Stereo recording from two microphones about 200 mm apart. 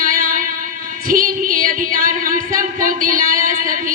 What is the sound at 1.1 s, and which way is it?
Singing, 45° right (ahead or behind).